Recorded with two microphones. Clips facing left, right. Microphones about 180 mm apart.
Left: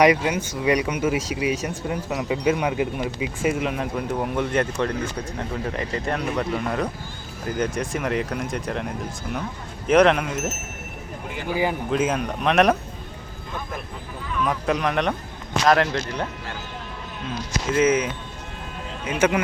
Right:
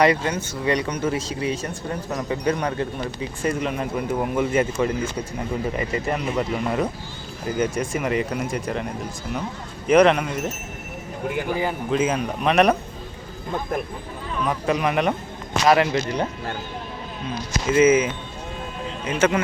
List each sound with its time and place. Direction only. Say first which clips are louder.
0.0 s speech: left 1 dB; 10° left (ahead or behind)
11.9 s speech: right 1 dB; centre (ahead or behind)
14.4 s speech: right 1 dB; centre (ahead or behind)
17.2 s speech: right 2 dB; centre (ahead or behind)
19.0 s speech: even; 10° left (ahead or behind)